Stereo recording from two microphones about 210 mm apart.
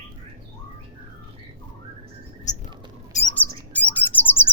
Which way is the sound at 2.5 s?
35° left (ahead or behind).